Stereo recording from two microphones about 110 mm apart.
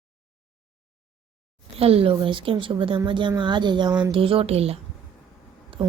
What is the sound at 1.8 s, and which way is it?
Speech, 60° right (ahead or behind).